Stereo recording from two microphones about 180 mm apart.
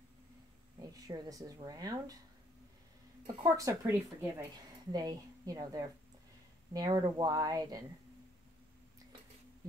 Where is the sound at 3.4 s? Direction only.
20° right (ahead or behind).